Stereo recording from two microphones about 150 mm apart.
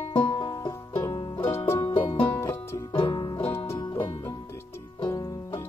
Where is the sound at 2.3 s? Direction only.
15° left (ahead or behind).